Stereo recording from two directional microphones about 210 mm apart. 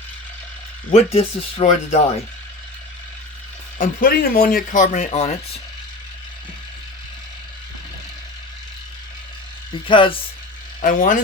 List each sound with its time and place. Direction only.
0.9 s speech: 30° left (ahead or behind)
3.8 s speech: 45° left (ahead or behind)
9.8 s speech: 25° left (ahead or behind)
10.8 s speech: 40° left (ahead or behind)